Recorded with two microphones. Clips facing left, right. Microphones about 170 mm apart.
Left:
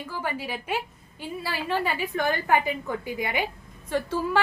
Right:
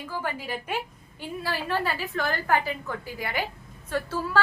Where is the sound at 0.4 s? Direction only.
10° left (ahead or behind).